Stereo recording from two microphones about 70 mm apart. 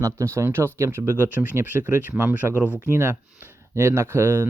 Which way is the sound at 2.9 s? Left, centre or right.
Right.